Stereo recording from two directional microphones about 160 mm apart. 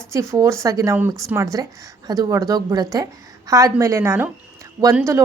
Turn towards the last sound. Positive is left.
turn(degrees=-20)  # may be behind; listen again after turning